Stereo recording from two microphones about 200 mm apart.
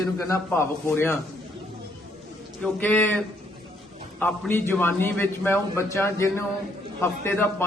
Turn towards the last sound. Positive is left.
turn(degrees=10)  # may be behind; listen again after turning